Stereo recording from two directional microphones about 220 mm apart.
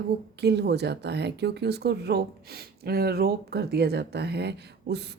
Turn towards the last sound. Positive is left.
turn(degrees=-50)  # may be behind; listen again after turning